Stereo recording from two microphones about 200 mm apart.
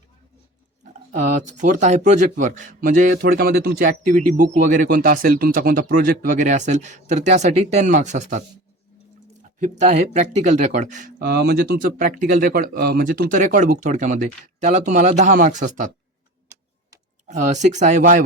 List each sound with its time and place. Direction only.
1.1 s a man's voice: 40° right (ahead or behind)
9.6 s a man's voice: 40° right (ahead or behind)
17.2 s a man's voice: 35° right (ahead or behind)